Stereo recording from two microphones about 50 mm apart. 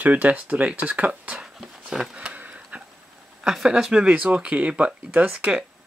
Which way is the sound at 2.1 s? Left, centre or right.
Right.